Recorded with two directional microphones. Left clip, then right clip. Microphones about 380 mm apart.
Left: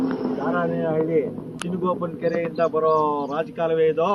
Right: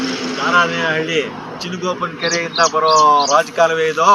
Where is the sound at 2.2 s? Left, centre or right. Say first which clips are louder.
Right 6 dB; right.